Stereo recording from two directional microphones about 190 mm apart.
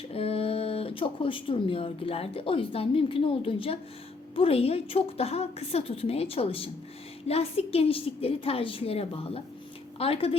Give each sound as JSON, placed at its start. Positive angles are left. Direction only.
{"t": 0.1, "sound": "a woman's voice", "side_deg": 30}